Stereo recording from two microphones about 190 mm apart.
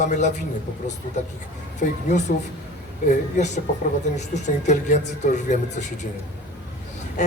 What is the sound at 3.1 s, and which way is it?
Speech, 40° left (ahead or behind).